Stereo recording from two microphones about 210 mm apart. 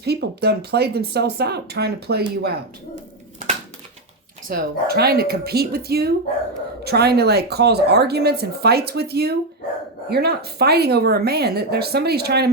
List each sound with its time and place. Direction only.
0.0 s speech: 50° right (ahead or behind)
4.4 s speech: 50° right (ahead or behind)